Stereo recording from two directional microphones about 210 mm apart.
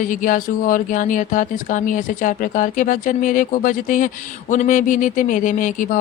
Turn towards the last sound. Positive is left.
turn(degrees=40)  # may be behind; listen again after turning